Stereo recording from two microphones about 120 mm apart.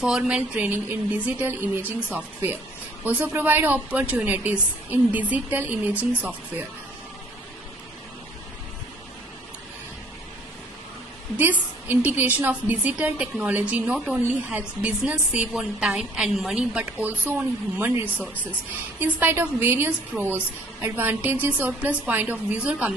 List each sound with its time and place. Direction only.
0.0 s a woman's voice: 5° right (ahead or behind)
11.3 s a woman's voice: 15° right (ahead or behind)